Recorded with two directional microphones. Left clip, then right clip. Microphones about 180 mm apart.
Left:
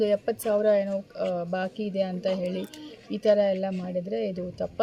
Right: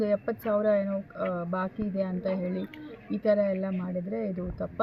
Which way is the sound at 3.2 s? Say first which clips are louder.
Left 4 dB; 25° left (ahead or behind).